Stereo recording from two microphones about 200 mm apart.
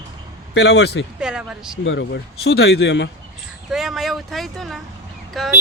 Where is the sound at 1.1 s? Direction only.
5° right (ahead or behind).